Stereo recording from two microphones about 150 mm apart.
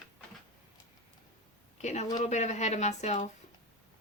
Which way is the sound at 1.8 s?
50° left (ahead or behind).